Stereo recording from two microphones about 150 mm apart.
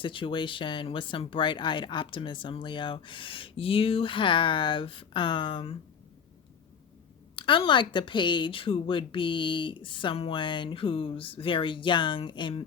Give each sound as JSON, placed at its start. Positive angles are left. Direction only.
{"t": 0.0, "sound": "speech", "side_deg": 35}
{"t": 7.3, "sound": "speech", "side_deg": 35}